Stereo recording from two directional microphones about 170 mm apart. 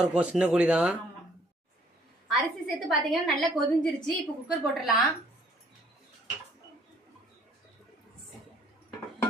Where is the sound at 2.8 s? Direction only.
Centre (ahead or behind).